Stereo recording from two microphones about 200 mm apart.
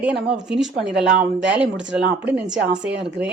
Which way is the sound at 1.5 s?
5° right (ahead or behind).